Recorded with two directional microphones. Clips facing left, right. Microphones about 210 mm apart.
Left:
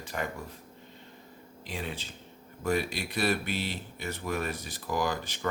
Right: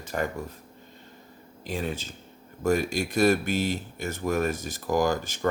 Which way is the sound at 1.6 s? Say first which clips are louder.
Right 6 dB; 45° right (ahead or behind).